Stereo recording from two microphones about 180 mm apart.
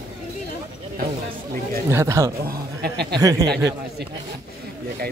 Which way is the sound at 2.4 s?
65° right (ahead or behind).